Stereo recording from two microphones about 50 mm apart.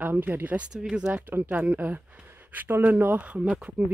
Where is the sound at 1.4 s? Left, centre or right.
Right.